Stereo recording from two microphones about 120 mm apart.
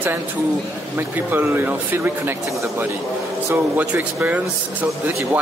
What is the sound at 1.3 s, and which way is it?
Speech, 15° right (ahead or behind).